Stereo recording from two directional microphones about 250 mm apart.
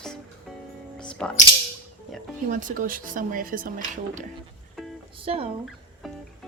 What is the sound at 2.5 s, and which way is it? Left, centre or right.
Speech, right.